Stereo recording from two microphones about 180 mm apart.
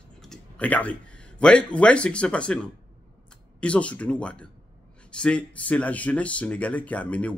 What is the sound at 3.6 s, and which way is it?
Speech, 5° left (ahead or behind).